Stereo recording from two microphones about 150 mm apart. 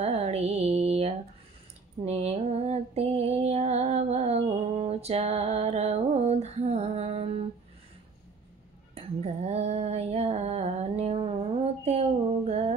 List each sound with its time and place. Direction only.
0.0 s mantra: 45° right (ahead or behind)
2.0 s music: 45° right (ahead or behind)
8.9 s a sound: 45° right (ahead or behind)